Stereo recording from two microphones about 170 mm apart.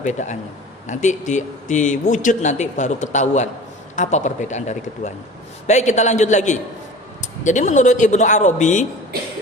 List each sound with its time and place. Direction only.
0.0 s a man's voice: 45° left (ahead or behind)